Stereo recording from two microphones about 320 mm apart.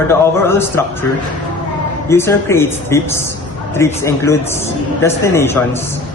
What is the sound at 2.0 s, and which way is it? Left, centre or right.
A man's voice, centre.